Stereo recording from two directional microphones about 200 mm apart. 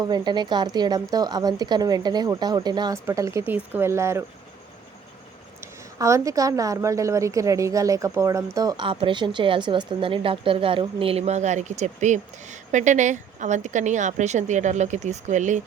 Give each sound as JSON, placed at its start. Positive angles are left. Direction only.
{"t": 0.0, "sound": "a woman's voice", "side_deg": -20}
{"t": 5.5, "sound": "a woman's voice", "side_deg": -15}